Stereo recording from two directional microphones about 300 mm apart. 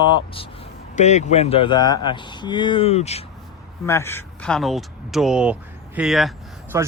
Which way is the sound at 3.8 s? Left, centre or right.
Centre.